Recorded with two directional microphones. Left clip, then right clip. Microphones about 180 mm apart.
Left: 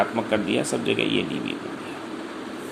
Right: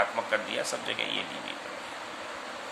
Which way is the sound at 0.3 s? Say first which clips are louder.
Left 6 dB; 20° left (ahead or behind).